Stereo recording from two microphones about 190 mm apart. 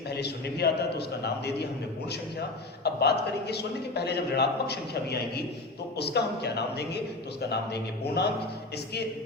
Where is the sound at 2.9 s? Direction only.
60° left (ahead or behind).